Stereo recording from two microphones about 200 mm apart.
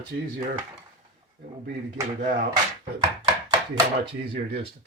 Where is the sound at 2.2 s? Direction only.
45° right (ahead or behind).